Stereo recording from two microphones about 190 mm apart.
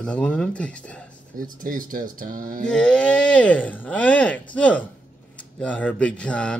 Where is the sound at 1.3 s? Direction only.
45° right (ahead or behind).